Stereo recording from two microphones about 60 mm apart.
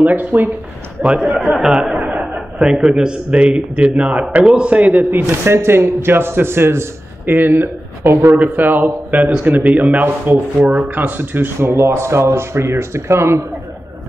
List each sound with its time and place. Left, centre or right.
0.0 s speech: right
1.0 s a man's voice: centre
2.0 s a man's voice: right
5.4 s a man's voice: right